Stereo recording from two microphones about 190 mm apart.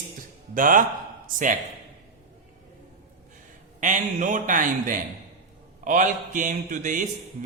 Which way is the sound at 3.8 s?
40° right (ahead or behind).